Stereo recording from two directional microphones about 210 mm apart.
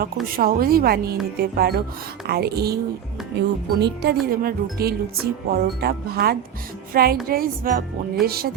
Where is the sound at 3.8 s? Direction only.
50° right (ahead or behind).